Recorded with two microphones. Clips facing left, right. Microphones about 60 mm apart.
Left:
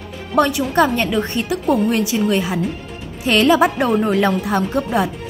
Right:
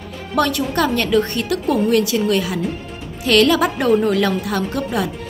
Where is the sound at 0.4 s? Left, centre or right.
Centre.